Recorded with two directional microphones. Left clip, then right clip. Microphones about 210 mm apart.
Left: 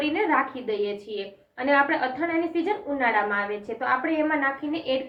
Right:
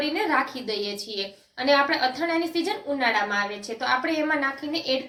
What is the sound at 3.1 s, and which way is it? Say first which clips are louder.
Speech: left 1 dB; 45° right (ahead or behind).